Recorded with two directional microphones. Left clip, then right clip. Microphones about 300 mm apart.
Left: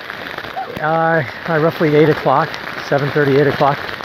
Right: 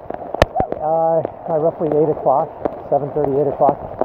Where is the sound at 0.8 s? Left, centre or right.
Left.